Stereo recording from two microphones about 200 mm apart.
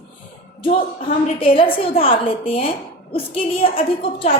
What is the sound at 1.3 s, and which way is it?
A woman's voice, 25° left (ahead or behind).